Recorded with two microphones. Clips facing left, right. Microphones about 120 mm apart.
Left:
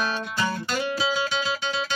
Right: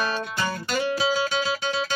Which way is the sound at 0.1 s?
Centre (ahead or behind).